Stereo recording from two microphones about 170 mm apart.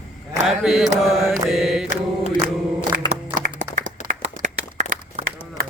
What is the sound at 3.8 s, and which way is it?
Clapping, 50° right (ahead or behind).